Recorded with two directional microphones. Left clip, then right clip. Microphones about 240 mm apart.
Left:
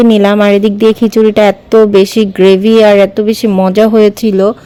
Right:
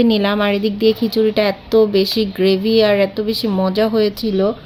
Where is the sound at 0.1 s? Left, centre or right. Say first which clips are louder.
Left 9 dB; left.